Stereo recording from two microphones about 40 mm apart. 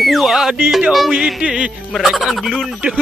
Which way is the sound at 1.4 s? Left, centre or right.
Right.